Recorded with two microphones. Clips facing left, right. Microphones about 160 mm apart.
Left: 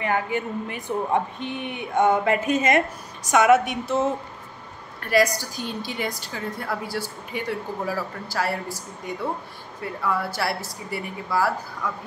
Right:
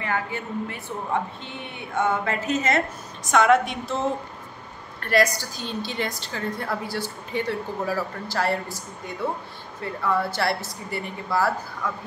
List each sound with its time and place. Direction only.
0.0 s a woman's voice: 15° left (ahead or behind)
5.0 s a woman's voice: 10° left (ahead or behind)
10.0 s a woman's voice: 10° left (ahead or behind)